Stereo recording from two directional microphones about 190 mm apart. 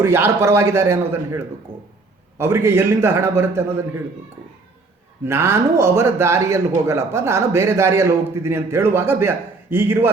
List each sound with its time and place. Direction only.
0.0 s a man's voice: 10° right (ahead or behind)
5.2 s a man's voice: 15° right (ahead or behind)